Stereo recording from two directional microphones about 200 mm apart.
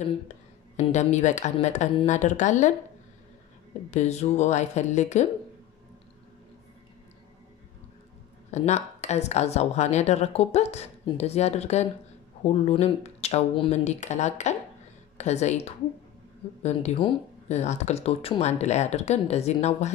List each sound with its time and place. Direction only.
0.7 s a woman's voice: 35° left (ahead or behind)
3.9 s a woman's voice: 35° left (ahead or behind)
8.5 s a woman's voice: 35° left (ahead or behind)